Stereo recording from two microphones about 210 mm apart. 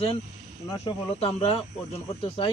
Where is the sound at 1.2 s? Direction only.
30° left (ahead or behind).